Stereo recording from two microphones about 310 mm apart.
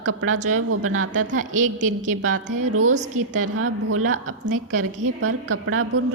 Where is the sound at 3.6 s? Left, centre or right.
Right.